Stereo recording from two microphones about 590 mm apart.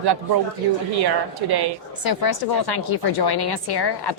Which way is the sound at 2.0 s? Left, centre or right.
Left.